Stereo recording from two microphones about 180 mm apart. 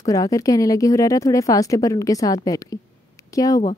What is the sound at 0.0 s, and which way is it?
Speech, 20° left (ahead or behind).